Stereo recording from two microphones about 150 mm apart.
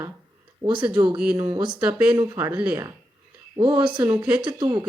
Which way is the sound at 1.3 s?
30° right (ahead or behind).